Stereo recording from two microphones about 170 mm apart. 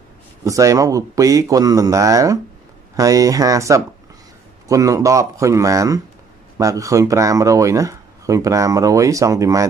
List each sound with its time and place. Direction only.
0.4 s speech: 20° right (ahead or behind)